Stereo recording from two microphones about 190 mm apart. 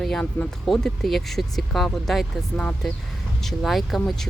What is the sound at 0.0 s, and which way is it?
Speech, centre (ahead or behind).